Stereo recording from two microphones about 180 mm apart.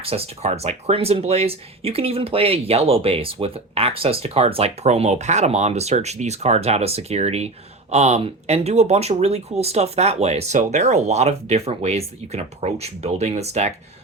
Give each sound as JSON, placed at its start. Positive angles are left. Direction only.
{"t": 0.0, "sound": "speech", "side_deg": -30}